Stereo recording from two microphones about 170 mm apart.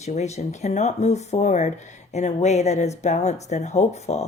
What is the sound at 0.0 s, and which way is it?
Speech, 40° left (ahead or behind).